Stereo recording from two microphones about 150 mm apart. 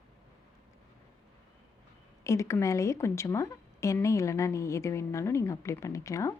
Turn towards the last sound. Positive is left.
turn(degrees=20)  # may be behind; listen again after turning